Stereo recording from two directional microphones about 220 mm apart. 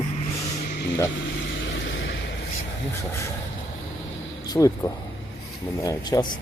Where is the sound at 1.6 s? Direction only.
55° left (ahead or behind).